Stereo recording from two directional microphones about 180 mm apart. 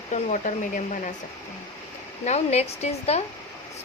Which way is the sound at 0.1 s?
40° left (ahead or behind).